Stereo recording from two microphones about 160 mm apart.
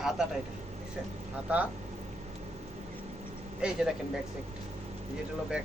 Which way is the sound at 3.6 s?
5° right (ahead or behind).